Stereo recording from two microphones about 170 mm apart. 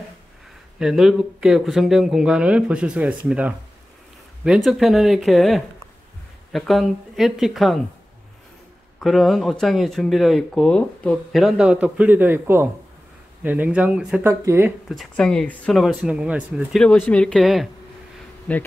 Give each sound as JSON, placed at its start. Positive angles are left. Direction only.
{"t": 0.7, "sound": "speech", "side_deg": -5}
{"t": 4.6, "sound": "speech", "side_deg": 0}
{"t": 9.0, "sound": "speech", "side_deg": 0}
{"t": 14.9, "sound": "speech", "side_deg": 0}
{"t": 18.5, "sound": "bee", "side_deg": 10}